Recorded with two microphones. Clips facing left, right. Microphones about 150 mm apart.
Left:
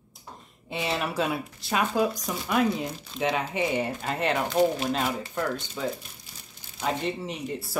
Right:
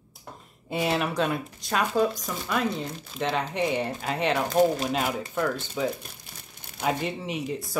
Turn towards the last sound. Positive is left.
turn(degrees=0)  # may be behind; listen again after turning